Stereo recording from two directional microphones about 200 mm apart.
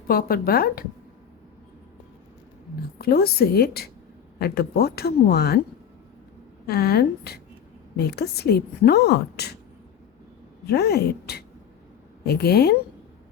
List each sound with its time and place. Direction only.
0.1 s a woman's voice: 45° left (ahead or behind)
3.0 s a woman's voice: 50° left (ahead or behind)
6.7 s a woman's voice: 50° left (ahead or behind)
10.7 s a woman's voice: 55° left (ahead or behind)